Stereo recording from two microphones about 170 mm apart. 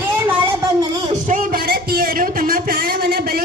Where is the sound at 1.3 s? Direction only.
55° right (ahead or behind).